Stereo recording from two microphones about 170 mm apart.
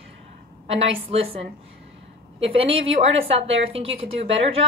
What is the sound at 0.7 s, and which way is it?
Speech, 35° right (ahead or behind).